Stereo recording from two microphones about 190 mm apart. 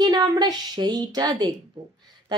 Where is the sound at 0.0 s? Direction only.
20° right (ahead or behind).